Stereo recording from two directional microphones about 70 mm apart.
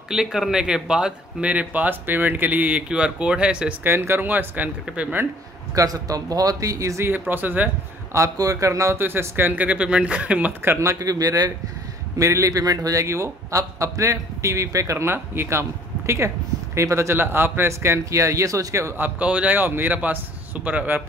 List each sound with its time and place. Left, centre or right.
0.1 s speech: centre
3.8 s speech: right
5.8 s speech: right
7.1 s speech: right
8.1 s a man's voice: right
8.9 s speech: right
10.6 s speech: right
11.0 s speech: right
12.2 s a man's voice: right
16.7 s a man's voice: right
18.9 s speech: right